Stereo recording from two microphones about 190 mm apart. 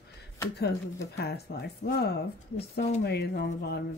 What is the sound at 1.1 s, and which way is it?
Speech, 55° left (ahead or behind).